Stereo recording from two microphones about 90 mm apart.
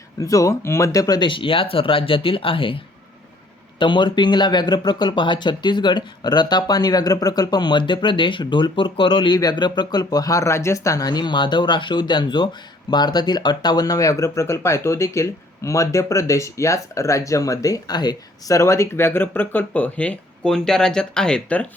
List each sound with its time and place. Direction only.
0.2 s speech: 40° left (ahead or behind)
1.2 s speech: 70° left (ahead or behind)
3.8 s speech: 60° left (ahead or behind); by 21.7 s 10° left (ahead or behind)